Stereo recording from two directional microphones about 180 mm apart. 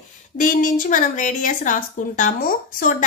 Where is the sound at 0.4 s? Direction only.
45° left (ahead or behind).